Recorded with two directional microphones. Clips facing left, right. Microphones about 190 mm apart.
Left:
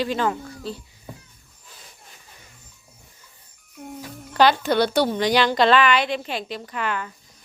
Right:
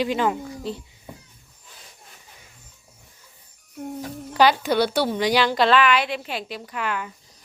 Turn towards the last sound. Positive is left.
turn(degrees=-5)  # may be behind; listen again after turning